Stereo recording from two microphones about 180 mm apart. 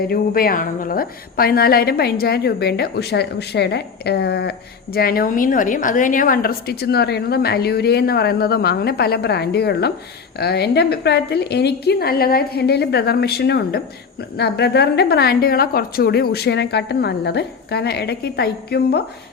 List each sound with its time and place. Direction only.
0.1 s a woman's voice: 55° left (ahead or behind)